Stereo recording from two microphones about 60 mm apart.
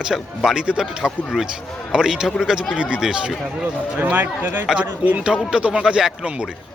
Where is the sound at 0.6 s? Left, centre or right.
Centre.